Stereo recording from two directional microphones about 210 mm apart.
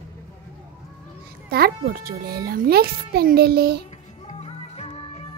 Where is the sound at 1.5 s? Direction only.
45° right (ahead or behind).